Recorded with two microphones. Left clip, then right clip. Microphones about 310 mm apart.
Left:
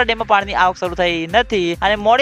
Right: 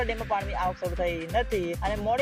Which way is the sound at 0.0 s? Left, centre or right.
Left.